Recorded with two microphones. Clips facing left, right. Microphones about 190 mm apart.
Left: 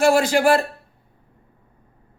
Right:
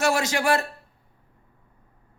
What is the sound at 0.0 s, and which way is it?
Speech, 30° left (ahead or behind).